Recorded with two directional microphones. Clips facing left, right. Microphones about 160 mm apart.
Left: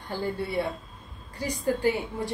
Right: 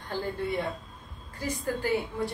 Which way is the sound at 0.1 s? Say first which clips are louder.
Left 1 dB; 10° left (ahead or behind).